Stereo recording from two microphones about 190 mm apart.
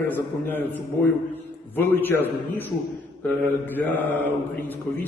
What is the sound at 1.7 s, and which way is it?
A man's voice, 10° left (ahead or behind).